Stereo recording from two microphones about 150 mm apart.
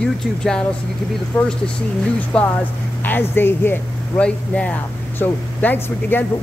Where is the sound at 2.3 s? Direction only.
5° left (ahead or behind).